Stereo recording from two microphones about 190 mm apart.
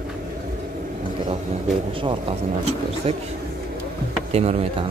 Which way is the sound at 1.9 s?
25° right (ahead or behind).